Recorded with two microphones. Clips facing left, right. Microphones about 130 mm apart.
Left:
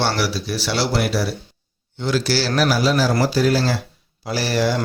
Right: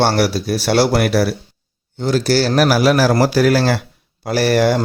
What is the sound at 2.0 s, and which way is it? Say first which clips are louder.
Speech: right 5 dB; 45° right (ahead or behind).